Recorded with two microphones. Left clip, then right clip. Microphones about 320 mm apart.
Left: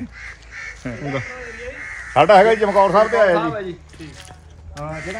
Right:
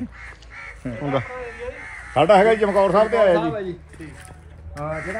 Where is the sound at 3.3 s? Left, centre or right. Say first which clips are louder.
Left 1 dB; centre.